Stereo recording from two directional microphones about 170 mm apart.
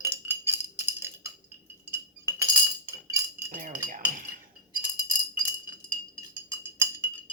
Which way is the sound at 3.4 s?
55° right (ahead or behind).